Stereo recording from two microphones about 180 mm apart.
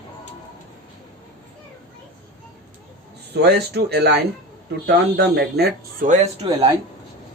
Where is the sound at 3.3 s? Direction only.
60° right (ahead or behind).